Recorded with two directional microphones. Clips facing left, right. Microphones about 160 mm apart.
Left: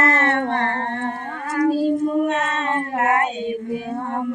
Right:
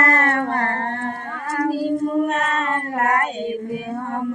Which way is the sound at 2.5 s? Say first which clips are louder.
Even; 25° left (ahead or behind).